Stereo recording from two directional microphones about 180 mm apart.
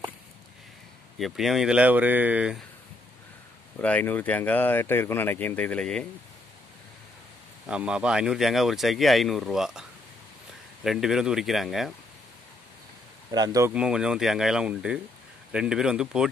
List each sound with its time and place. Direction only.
1.1 s speech: centre (ahead or behind)
3.7 s speech: 10° left (ahead or behind)
7.6 s speech: 5° right (ahead or behind)
13.3 s speech: 20° right (ahead or behind)
13.7 s speech: 5° right (ahead or behind)